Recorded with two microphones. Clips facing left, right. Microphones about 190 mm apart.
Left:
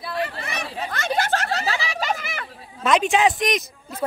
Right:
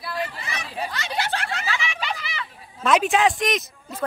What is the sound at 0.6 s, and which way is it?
Chatter, 50° left (ahead or behind).